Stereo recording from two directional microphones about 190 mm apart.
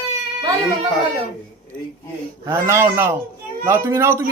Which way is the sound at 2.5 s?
15° right (ahead or behind).